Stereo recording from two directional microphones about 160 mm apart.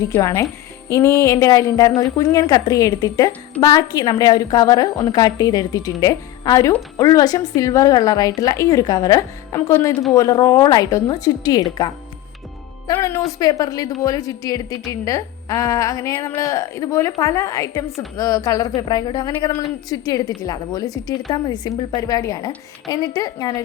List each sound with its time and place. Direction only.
0.0 s a woman's voice: 20° left (ahead or behind)
12.9 s a woman's voice: 20° left (ahead or behind)